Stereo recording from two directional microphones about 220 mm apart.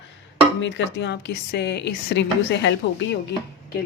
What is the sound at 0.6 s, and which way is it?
A woman's voice, 55° left (ahead or behind).